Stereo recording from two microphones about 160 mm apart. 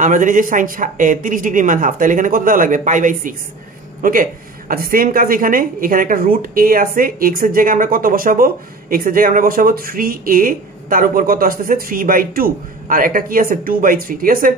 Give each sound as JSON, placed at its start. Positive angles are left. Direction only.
{"t": 0.0, "sound": "a woman's voice", "side_deg": -55}